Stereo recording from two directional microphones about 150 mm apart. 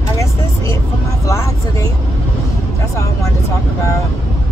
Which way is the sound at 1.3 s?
20° left (ahead or behind).